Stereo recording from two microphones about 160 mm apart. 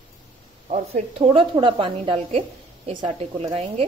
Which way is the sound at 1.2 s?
35° right (ahead or behind).